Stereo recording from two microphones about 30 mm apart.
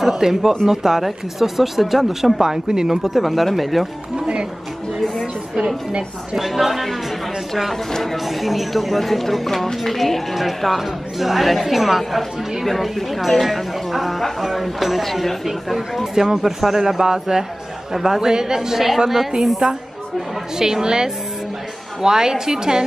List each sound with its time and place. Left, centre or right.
0.1 s a man's voice: centre
2.4 s a man's voice: centre
3.2 s a woman's voice: centre
6.3 s a woman's voice: centre
7.7 s speech: centre
8.2 s a woman's voice: centre
12.0 s a woman's voice: centre; by 22.8 s right